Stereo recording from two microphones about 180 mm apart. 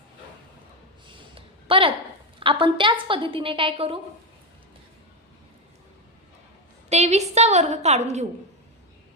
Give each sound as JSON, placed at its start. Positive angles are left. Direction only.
{"t": 1.0, "sound": "a sound", "side_deg": -30}
{"t": 2.4, "sound": "a woman's voice", "side_deg": -30}
{"t": 6.9, "sound": "a woman's voice", "side_deg": -40}